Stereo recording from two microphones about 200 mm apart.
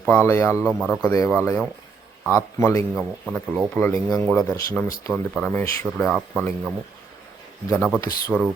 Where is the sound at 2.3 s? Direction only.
15° left (ahead or behind).